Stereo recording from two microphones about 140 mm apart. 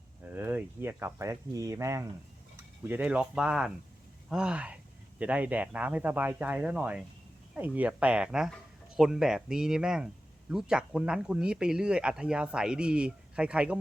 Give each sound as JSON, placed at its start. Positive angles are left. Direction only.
{"t": 0.3, "sound": "speech", "side_deg": -15}